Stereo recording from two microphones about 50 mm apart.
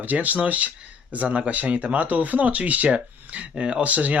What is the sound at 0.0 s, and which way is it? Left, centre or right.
Speech, right.